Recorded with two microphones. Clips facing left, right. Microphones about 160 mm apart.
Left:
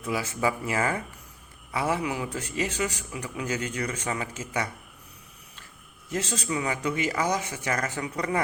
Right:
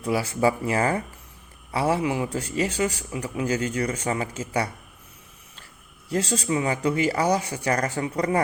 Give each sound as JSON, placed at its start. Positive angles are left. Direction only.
{"t": 0.0, "sound": "speech", "side_deg": -35}
{"t": 6.1, "sound": "speech", "side_deg": -30}